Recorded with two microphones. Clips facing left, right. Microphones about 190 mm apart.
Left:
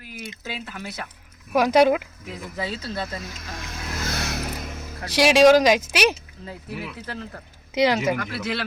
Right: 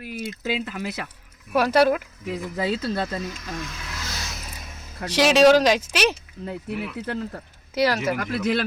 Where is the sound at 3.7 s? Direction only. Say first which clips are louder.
Left 5 dB; 55° left (ahead or behind); by 4.9 s 70° left (ahead or behind).